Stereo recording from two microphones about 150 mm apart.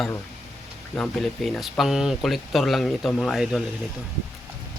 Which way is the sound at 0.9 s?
5° left (ahead or behind).